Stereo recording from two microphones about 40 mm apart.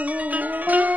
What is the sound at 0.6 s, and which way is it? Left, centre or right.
Music, right.